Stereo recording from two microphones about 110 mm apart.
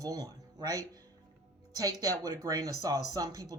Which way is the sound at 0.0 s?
35° right (ahead or behind).